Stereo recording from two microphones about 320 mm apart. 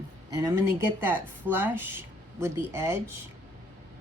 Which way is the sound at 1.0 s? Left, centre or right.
Centre.